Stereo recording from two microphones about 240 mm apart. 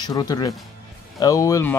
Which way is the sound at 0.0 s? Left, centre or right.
Centre.